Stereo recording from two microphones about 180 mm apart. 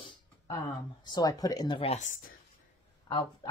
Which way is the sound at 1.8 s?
40° left (ahead or behind).